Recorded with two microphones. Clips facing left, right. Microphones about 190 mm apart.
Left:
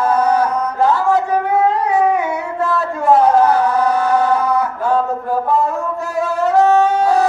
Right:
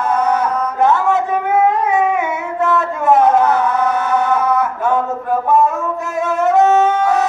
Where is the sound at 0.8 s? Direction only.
20° right (ahead or behind).